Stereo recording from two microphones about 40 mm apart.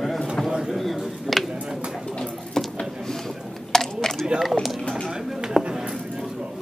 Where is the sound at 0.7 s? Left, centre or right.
Centre.